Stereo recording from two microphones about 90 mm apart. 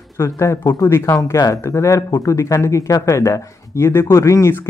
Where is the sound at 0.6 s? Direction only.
45° left (ahead or behind).